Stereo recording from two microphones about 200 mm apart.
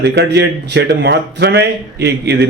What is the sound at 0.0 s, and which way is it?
A man's voice, 60° right (ahead or behind).